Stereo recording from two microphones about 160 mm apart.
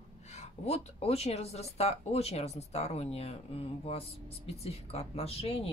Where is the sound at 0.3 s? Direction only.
45° left (ahead or behind).